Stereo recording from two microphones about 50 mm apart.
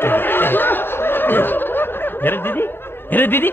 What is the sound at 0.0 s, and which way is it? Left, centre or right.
Laughter, left.